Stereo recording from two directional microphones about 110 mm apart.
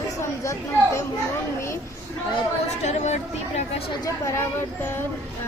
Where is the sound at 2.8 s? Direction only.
90° left.